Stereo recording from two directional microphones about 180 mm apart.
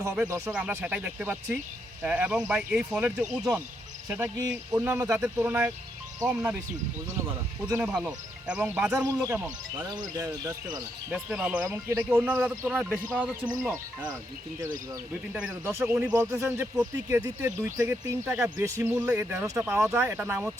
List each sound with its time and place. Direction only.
0.0 s speech: 15° right (ahead or behind)
7.7 s speech: 5° right (ahead or behind)
9.8 s speech: 20° right (ahead or behind)
11.1 s speech: 5° right (ahead or behind)
15.3 s speech: 5° right (ahead or behind)